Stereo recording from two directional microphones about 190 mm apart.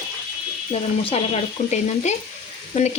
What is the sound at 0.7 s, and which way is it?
Speech, 30° left (ahead or behind).